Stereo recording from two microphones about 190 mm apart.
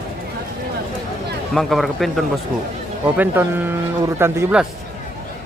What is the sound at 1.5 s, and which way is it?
Speech, centre (ahead or behind).